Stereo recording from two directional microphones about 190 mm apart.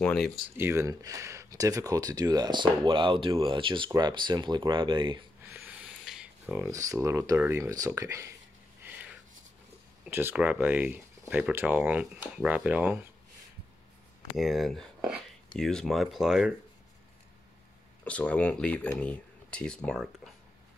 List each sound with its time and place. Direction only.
0.0 s speech: centre (ahead or behind)
0.6 s speech: 15° right (ahead or behind)
6.0 s a sound: 5° right (ahead or behind)
6.6 s speech: 15° right (ahead or behind)
8.8 s a sound: 10° right (ahead or behind)
10.0 s speech: 10° right (ahead or behind)
14.2 s speech: centre (ahead or behind)
18.0 s speech: 5° left (ahead or behind)